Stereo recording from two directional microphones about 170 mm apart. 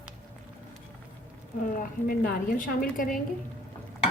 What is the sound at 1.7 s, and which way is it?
A woman's voice, 55° left (ahead or behind).